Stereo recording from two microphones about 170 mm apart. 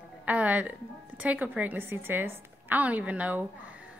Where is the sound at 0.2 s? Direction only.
10° right (ahead or behind).